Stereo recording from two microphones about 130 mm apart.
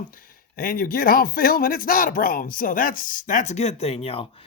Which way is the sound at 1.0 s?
90° left.